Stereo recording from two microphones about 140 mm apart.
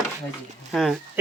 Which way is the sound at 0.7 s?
Centre (ahead or behind).